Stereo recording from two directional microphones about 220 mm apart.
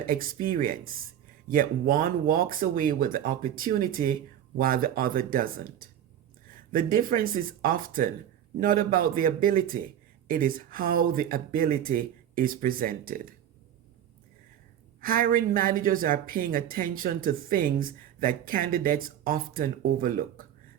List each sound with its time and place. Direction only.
0.0 s speech: 40° right (ahead or behind)
15.0 s speech: 40° right (ahead or behind)